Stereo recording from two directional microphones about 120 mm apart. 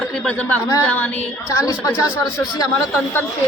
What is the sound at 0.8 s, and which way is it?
Speech, 15° left (ahead or behind).